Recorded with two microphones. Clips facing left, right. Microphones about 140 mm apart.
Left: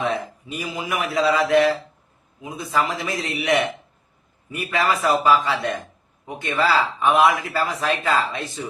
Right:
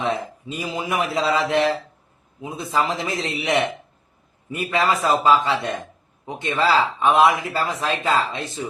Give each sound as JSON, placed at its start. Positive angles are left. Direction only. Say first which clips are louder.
{"t": 0.0, "sound": "speech", "louder": "even", "side_deg": -25}
{"t": 4.5, "sound": "speech", "louder": "right 1 dB", "side_deg": -25}